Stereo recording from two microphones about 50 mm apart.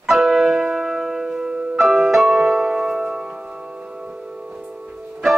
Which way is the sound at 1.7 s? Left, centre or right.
Centre.